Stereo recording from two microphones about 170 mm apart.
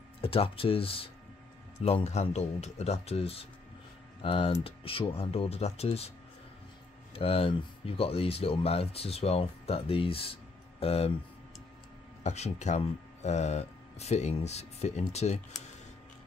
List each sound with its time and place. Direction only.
0.2 s speech: 35° left (ahead or behind)
7.2 s speech: 35° left (ahead or behind)
12.2 s speech: 40° left (ahead or behind)